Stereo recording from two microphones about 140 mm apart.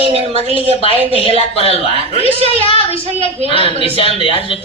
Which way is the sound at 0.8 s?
40° right (ahead or behind).